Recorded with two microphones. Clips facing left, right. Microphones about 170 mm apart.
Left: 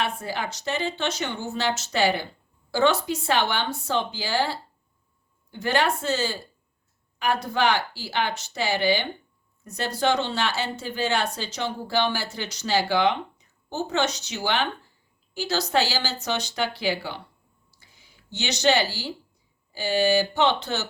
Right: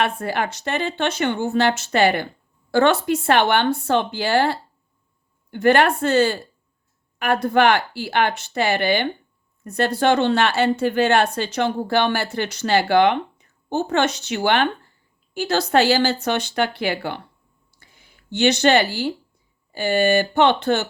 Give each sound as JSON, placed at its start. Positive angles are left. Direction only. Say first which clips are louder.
{"t": 0.0, "sound": "a woman's voice", "louder": "right 6 dB", "side_deg": -60}
{"t": 17.7, "sound": "a sound", "louder": "right 4 dB", "side_deg": -55}
{"t": 19.7, "sound": "a woman's voice", "louder": "right 4 dB", "side_deg": -55}